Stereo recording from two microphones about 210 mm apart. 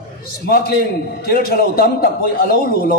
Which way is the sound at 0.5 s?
45° left (ahead or behind).